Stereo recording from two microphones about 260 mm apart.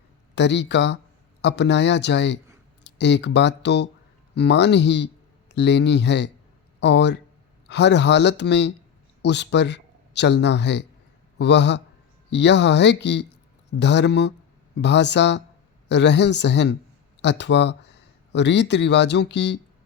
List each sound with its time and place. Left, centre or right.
0.3 s a man's voice: left